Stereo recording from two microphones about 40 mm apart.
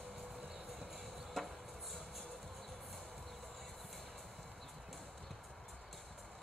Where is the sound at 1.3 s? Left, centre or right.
Centre.